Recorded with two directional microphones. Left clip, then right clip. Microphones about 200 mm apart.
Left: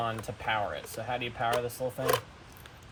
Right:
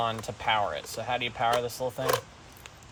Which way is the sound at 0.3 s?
15° right (ahead or behind).